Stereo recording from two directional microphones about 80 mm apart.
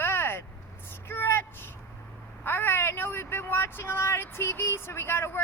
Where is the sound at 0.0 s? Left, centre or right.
Left.